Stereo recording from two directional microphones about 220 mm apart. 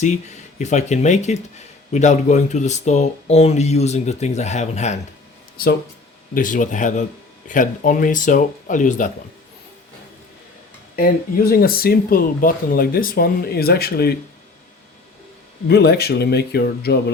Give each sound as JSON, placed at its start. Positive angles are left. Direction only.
{"t": 0.0, "sound": "speech", "side_deg": 30}
{"t": 6.3, "sound": "speech", "side_deg": 35}
{"t": 10.9, "sound": "speech", "side_deg": 40}
{"t": 15.7, "sound": "speech", "side_deg": 45}